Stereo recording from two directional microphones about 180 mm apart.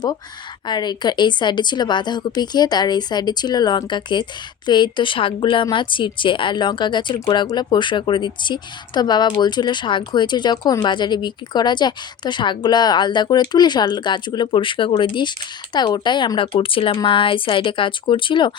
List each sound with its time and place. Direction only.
0.7 s a woman's voice: 25° left (ahead or behind)